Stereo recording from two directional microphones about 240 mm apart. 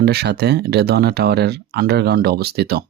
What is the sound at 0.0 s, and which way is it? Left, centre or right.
Speech, right.